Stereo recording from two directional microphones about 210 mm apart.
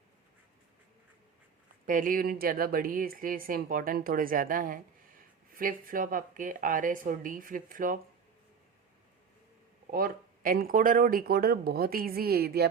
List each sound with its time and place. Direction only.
1.9 s speech: 40° right (ahead or behind)
9.9 s speech: 45° right (ahead or behind)